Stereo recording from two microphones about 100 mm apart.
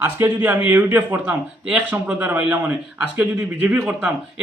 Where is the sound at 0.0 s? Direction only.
20° right (ahead or behind).